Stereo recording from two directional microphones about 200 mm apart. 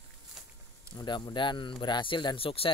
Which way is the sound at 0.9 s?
20° left (ahead or behind).